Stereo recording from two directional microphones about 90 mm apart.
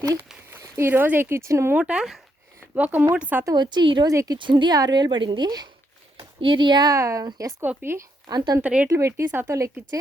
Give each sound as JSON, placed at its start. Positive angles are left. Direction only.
{"t": 0.6, "sound": "speech", "side_deg": -25}
{"t": 1.7, "sound": "speech", "side_deg": -10}
{"t": 2.7, "sound": "speech", "side_deg": -15}
{"t": 3.5, "sound": "a woman's voice", "side_deg": -55}
{"t": 4.1, "sound": "speech", "side_deg": -35}
{"t": 4.4, "sound": "a woman's voice", "side_deg": -60}
{"t": 6.4, "sound": "a woman's voice", "side_deg": -65}
{"t": 6.9, "sound": "speech", "side_deg": -35}
{"t": 7.6, "sound": "speech", "side_deg": -20}
{"t": 8.3, "sound": "a woman's voice", "side_deg": -50}
{"t": 8.6, "sound": "speech", "side_deg": -15}
{"t": 8.9, "sound": "speech", "side_deg": -35}